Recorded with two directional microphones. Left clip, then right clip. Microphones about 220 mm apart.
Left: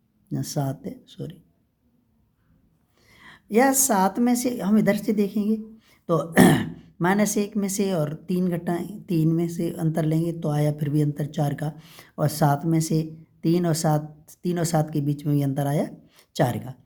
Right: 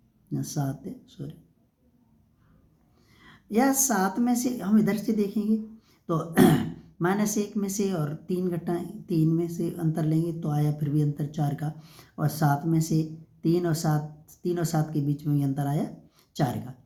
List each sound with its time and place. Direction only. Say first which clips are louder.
0.3 s speech: left 4 dB; 40° left (ahead or behind)
3.1 s speech: left 6 dB; 45° left (ahead or behind)